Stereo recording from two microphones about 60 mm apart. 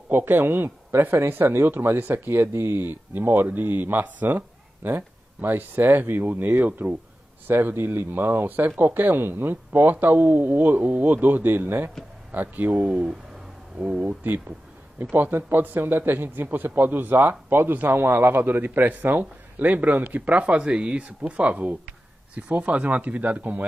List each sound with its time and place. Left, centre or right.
0.1 s a man's voice: right
15.1 s a man's voice: right